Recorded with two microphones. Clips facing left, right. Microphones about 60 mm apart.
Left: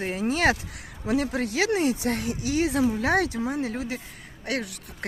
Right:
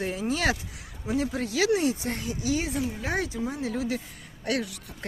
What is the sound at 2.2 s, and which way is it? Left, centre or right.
Speech, left.